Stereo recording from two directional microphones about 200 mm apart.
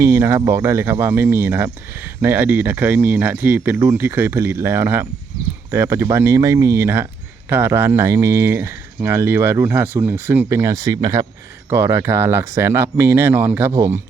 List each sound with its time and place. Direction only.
0.0 s speech: 10° right (ahead or behind)